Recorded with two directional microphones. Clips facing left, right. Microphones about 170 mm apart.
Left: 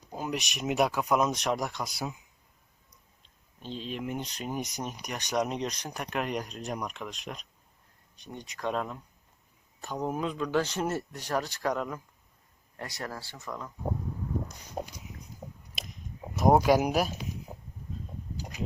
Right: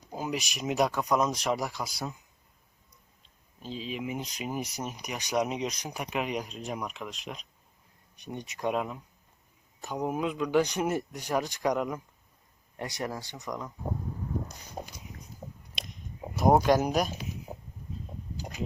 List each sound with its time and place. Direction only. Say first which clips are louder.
0.1 s speech: right 1 dB; 5° right (ahead or behind)
3.6 s speech: even; centre (ahead or behind)
8.2 s speech: right 2 dB; 20° right (ahead or behind)
8.7 s speech: right 2 dB; 10° right (ahead or behind)
15.7 s a sound: even; centre (ahead or behind)
16.4 s speech: even; centre (ahead or behind)